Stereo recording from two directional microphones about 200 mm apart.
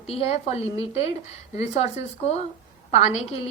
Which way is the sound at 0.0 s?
30° left (ahead or behind).